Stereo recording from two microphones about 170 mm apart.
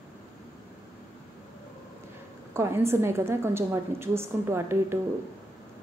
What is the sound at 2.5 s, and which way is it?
A woman's voice, 15° right (ahead or behind).